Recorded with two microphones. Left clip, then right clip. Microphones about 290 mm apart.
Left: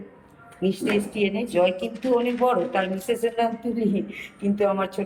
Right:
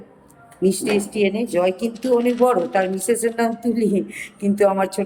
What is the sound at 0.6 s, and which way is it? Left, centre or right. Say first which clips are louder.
A woman's voice: right 5 dB; centre.